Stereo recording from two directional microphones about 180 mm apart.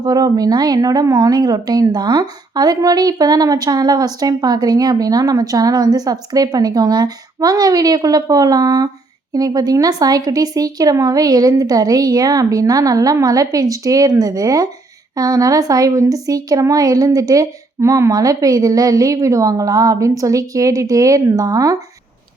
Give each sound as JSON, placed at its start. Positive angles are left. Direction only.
{"t": 0.0, "sound": "speech", "side_deg": -20}